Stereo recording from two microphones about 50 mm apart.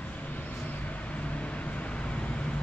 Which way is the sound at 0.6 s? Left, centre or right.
Left.